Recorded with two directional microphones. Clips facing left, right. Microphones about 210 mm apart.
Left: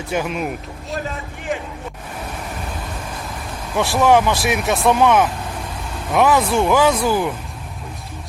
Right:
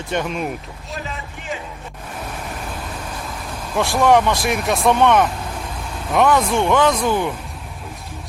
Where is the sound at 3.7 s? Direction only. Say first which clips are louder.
Even; centre (ahead or behind).